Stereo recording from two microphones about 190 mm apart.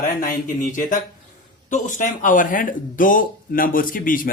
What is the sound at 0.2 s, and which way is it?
A man's voice, 45° left (ahead or behind).